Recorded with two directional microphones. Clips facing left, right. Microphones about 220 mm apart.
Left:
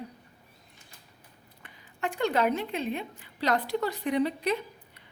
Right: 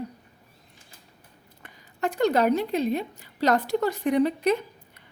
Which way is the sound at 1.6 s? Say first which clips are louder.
Right 5 dB; 45° right (ahead or behind).